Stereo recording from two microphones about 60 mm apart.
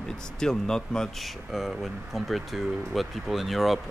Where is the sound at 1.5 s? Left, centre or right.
Centre.